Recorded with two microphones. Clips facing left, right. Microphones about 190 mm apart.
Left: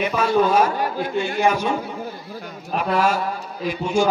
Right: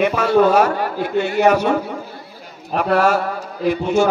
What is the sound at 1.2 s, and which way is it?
Speech, 70° right (ahead or behind).